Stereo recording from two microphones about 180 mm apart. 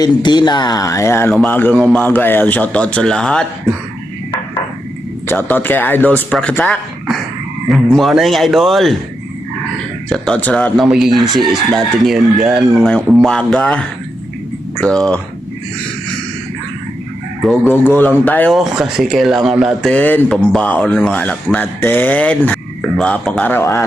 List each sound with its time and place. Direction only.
0.0 s a man's voice: 25° left (ahead or behind); by 3.4 s 5° left (ahead or behind)
5.3 s a man's voice: 10° left (ahead or behind)
10.1 s speech: 5° left (ahead or behind)
17.7 s a man's voice: 10° left (ahead or behind)
18.5 s a man's voice: centre (ahead or behind)